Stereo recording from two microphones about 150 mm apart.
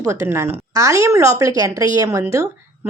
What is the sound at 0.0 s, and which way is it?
A woman's voice, 20° right (ahead or behind).